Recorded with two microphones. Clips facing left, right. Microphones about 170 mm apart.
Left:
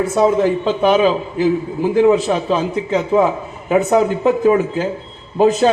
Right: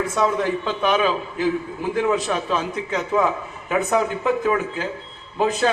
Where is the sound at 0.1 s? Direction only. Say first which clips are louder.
Left 7 dB; 30° left (ahead or behind).